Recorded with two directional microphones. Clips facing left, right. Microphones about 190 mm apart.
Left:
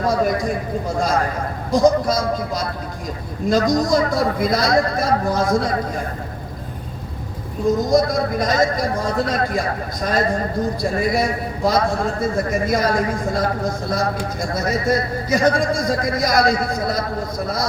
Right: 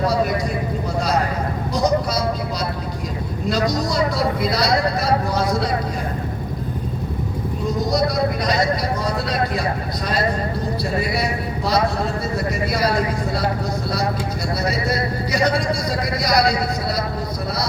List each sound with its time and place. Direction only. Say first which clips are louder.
0.1 s a man's voice: left 2 dB; 50° left (ahead or behind)
1.7 s a man's voice: left 5 dB; 50° left (ahead or behind)
7.9 s a man's voice: left 3 dB; 50° left (ahead or behind)
14.5 s a man's voice: left 3 dB; 45° left (ahead or behind)